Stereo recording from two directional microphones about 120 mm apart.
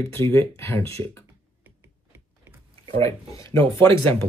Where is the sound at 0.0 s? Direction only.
20° left (ahead or behind).